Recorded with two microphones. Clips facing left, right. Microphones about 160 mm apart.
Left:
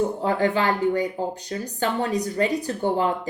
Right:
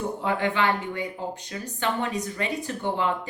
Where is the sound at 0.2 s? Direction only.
35° left (ahead or behind).